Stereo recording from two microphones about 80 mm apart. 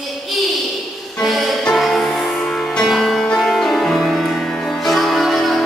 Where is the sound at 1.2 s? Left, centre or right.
Centre.